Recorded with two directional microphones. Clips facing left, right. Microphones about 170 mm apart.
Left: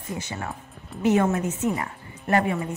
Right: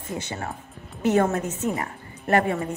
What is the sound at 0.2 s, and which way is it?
A woman's voice, 30° right (ahead or behind).